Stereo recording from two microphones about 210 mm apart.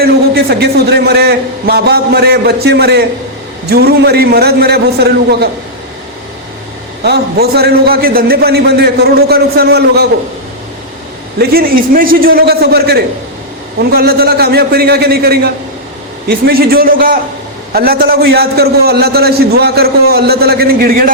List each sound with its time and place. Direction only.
0.0 s a man's voice: 50° right (ahead or behind)
7.0 s a man's voice: 50° right (ahead or behind)
11.3 s a man's voice: 45° right (ahead or behind)